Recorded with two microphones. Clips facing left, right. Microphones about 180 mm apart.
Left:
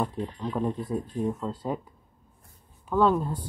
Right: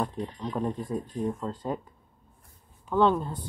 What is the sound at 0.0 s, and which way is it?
Speech, 5° left (ahead or behind).